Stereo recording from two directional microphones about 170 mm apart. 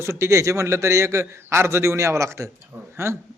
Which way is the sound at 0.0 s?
15° right (ahead or behind).